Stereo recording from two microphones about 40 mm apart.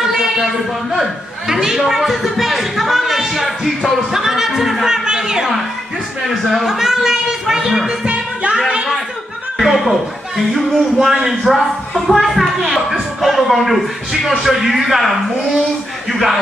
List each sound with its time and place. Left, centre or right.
0.0 s a sound: centre
1.5 s speech: centre
6.4 s speech: centre
8.1 s music: right
9.6 s a man's voice: centre